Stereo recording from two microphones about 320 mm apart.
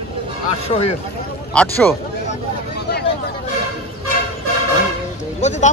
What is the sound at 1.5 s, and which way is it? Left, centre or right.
Speech, centre.